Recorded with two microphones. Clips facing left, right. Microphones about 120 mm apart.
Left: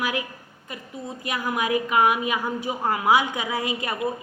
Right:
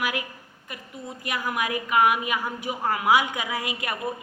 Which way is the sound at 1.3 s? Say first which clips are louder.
Left 2 dB; centre (ahead or behind).